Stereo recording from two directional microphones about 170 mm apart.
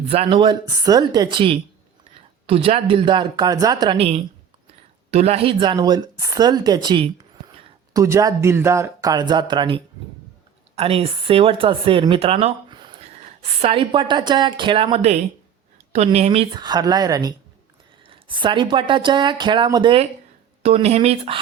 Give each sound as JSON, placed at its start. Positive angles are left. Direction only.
{"t": 0.1, "sound": "speech", "side_deg": -35}
{"t": 3.9, "sound": "speech", "side_deg": -35}
{"t": 16.6, "sound": "speech", "side_deg": -25}